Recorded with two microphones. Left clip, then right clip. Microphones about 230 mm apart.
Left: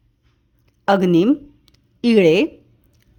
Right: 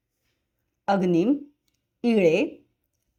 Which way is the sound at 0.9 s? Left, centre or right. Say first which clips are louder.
Left 7 dB; left.